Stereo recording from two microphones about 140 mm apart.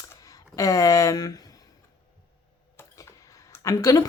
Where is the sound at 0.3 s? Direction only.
25° left (ahead or behind).